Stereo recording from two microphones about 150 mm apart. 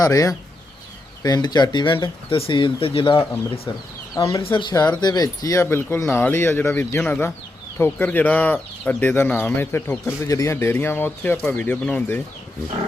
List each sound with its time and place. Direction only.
0.0 s speech: 25° left (ahead or behind)